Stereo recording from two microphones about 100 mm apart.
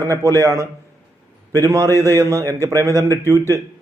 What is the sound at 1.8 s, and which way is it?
Speech, 25° left (ahead or behind).